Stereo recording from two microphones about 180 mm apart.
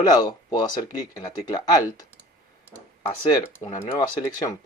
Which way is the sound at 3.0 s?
15° left (ahead or behind).